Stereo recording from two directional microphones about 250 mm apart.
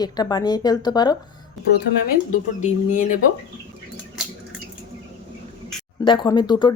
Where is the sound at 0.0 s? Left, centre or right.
Centre.